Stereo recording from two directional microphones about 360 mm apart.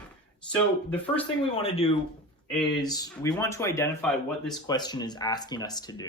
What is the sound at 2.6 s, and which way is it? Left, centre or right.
Speech, centre.